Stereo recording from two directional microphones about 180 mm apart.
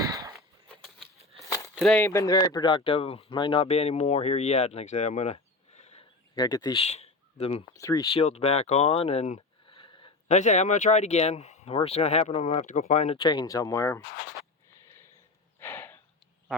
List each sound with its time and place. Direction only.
0.0 s a sound: 20° right (ahead or behind)
1.7 s speech: centre (ahead or behind)
2.0 s speech: 20° left (ahead or behind); by 6.1 s 35° left (ahead or behind)
6.3 s speech: 20° left (ahead or behind)
6.7 s speech: 35° left (ahead or behind)
7.7 s speech: 15° left (ahead or behind)
8.1 s speech: 35° left (ahead or behind)
9.7 s a sound: 25° left (ahead or behind)
10.2 s speech: 40° left (ahead or behind)
13.1 s speech: 25° left (ahead or behind)
15.6 s snort: 10° left (ahead or behind)